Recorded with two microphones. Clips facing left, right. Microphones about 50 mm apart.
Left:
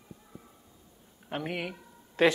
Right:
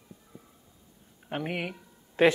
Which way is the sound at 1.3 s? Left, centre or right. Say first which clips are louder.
Right 2 dB; centre.